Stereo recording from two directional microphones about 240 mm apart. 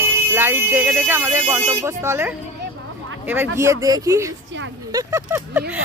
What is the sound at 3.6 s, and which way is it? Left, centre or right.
Speech, centre.